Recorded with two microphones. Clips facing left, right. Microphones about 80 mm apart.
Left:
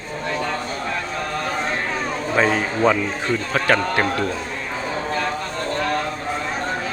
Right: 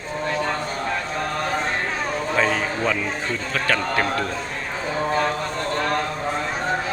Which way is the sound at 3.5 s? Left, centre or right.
Left.